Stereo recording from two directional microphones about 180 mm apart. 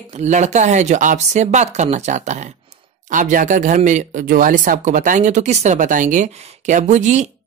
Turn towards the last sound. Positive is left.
turn(degrees=-40)  # may be behind; listen again after turning